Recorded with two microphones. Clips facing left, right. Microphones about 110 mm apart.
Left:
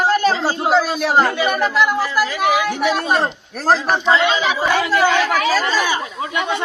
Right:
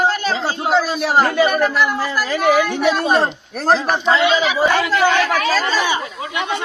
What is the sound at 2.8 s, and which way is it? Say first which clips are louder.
Speech: right 2 dB; 5° left (ahead or behind).